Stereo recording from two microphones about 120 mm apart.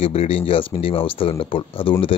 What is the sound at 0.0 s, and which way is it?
Speech, 55° left (ahead or behind).